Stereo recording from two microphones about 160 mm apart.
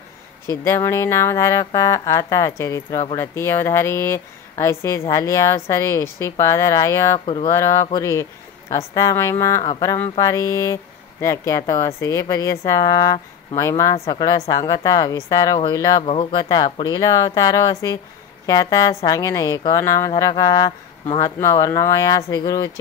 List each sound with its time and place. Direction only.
0.5 s speech: 20° left (ahead or behind)
16.0 s speech: 35° left (ahead or behind); by 22.7 s 20° left (ahead or behind)